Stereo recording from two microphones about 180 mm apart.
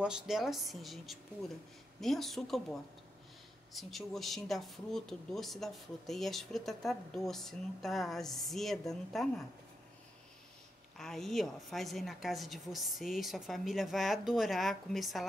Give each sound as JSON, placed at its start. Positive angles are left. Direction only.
{"t": 0.0, "sound": "speech", "side_deg": -5}
{"t": 11.0, "sound": "speech", "side_deg": 0}